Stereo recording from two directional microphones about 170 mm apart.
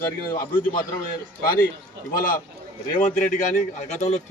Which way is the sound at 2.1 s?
55° left (ahead or behind).